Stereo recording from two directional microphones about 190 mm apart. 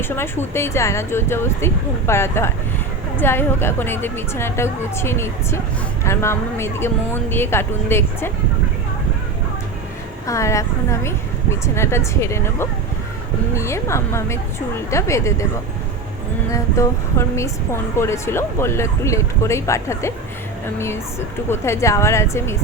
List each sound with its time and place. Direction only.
0.0 s speech: 10° left (ahead or behind)
10.2 s speech: 15° left (ahead or behind)
16.5 s speech: 15° left (ahead or behind)